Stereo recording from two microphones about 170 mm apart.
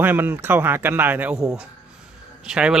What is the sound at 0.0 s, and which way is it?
Speech, 10° right (ahead or behind).